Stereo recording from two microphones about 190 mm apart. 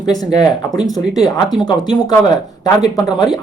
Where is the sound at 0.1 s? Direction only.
20° left (ahead or behind).